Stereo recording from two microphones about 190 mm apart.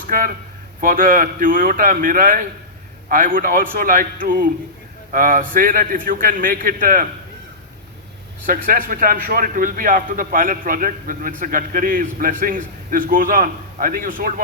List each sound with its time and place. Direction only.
0.1 s a man's voice: 50° right (ahead or behind)
8.4 s a man's voice: 45° right (ahead or behind)